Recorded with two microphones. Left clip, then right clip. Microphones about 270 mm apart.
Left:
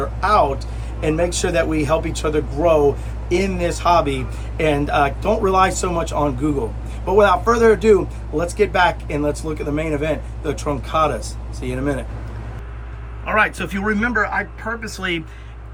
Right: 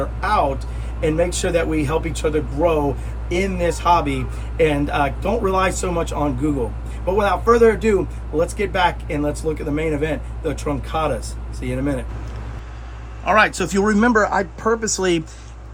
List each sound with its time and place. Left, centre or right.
0.2 s speech: centre
13.2 s speech: centre
14.6 s speech: right
14.9 s speech: centre